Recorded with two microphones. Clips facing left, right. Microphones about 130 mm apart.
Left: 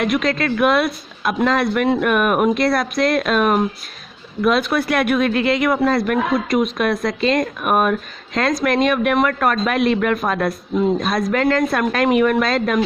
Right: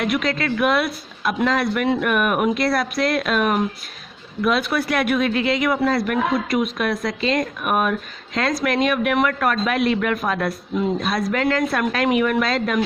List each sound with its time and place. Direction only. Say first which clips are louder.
0.0 s speech: left 3 dB; 45° left (ahead or behind)
4.7 s speech: left 3 dB; 50° left (ahead or behind)